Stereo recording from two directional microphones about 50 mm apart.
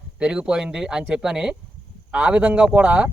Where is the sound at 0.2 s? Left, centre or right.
Centre.